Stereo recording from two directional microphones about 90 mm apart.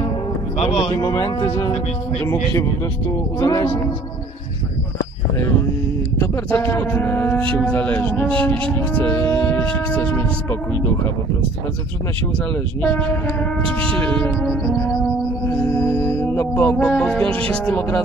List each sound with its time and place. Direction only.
0.8 s speech: 40° left (ahead or behind)
3.1 s speech: 40° left (ahead or behind)
6.1 s speech: 30° left (ahead or behind)
7.6 s music: 20° left (ahead or behind)
8.7 s speech: 20° left (ahead or behind)
12.8 s speech: 20° left (ahead or behind)
15.4 s music: 35° left (ahead or behind)
16.3 s music: 20° left (ahead or behind)